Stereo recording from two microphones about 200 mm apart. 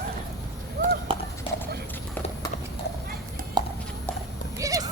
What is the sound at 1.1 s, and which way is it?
Horse, 25° right (ahead or behind).